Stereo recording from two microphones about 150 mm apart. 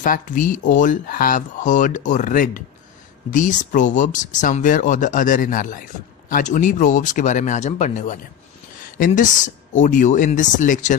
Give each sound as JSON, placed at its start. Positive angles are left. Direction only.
{"t": 0.0, "sound": "speech", "side_deg": 65}
{"t": 3.3, "sound": "speech", "side_deg": 60}